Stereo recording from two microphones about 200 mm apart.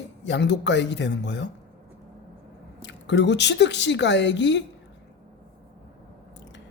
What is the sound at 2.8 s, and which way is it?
Speech, 60° left (ahead or behind).